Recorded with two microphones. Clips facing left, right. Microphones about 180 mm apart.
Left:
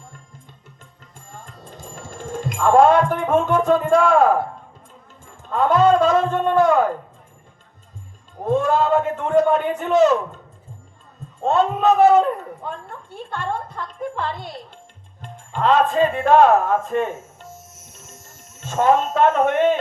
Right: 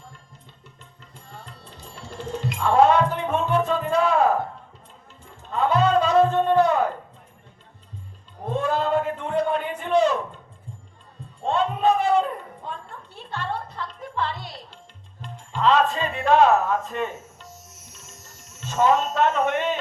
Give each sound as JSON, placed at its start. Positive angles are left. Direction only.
{"t": 1.1, "sound": "music", "side_deg": 45}
{"t": 5.2, "sound": "a sound", "side_deg": 50}
{"t": 8.4, "sound": "a man's voice", "side_deg": 45}
{"t": 11.3, "sound": "a man's voice", "side_deg": 45}